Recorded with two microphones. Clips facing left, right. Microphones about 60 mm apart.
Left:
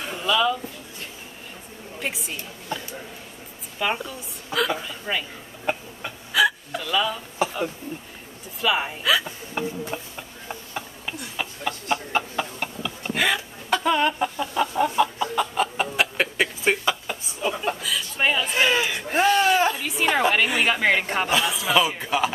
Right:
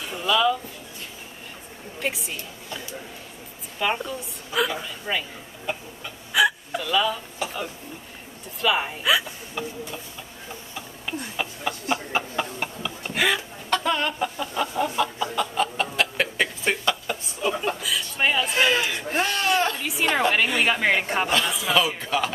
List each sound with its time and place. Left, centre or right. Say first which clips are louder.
0.2 s speech: right 1 dB; centre
2.0 s a woman's voice: right 2 dB; centre
3.8 s a woman's voice: right 1 dB; centre
6.3 s hiccup: even; centre
8.5 s a woman's voice: even; centre
9.6 s tick-tock: left 4 dB; left
11.3 s chicken: left 2 dB; centre
15.3 s a sound: left 1 dB; centre